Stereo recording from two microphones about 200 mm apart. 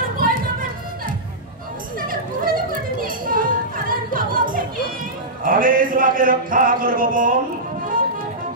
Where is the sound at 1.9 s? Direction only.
45° right (ahead or behind).